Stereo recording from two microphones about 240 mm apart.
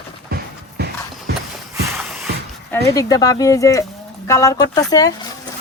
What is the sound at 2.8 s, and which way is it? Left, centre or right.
Speech, centre.